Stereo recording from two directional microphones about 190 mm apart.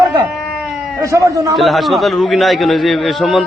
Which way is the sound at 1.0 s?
15° right (ahead or behind).